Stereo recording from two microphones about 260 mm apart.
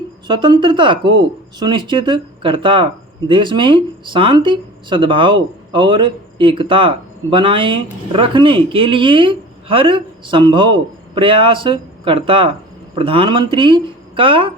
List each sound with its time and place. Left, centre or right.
0.3 s speech: centre